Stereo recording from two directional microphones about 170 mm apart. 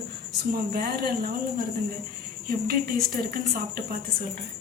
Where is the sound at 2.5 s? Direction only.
60° right (ahead or behind).